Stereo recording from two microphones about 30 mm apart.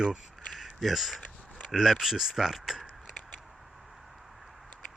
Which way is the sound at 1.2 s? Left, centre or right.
Left.